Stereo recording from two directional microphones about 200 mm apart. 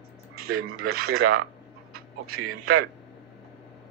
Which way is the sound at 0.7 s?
50° right (ahead or behind).